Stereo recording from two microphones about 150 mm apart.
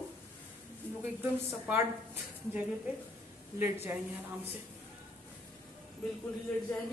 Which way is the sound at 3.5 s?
15° right (ahead or behind).